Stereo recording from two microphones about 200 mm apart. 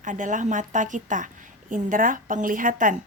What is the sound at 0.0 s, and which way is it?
A woman's voice, 40° right (ahead or behind).